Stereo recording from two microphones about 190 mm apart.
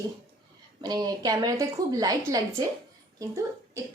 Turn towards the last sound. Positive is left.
turn(degrees=-15)  # may be behind; listen again after turning